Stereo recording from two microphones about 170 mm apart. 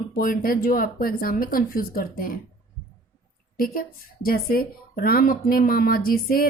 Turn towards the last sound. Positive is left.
turn(degrees=60)  # may be behind; listen again after turning